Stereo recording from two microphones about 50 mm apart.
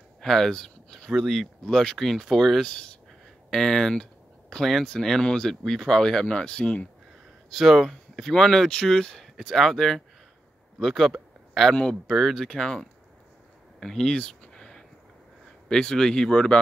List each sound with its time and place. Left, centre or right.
0.2 s speech: centre
1.1 s speech: centre
2.6 s speech: centre
6.2 s speech: centre
7.4 s speech: centre
11.7 s speech: centre
12.1 s speech: centre
13.7 s a sound: centre
15.7 s speech: centre